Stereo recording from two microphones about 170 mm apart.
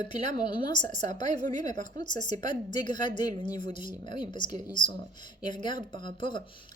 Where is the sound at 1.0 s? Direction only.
45° right (ahead or behind).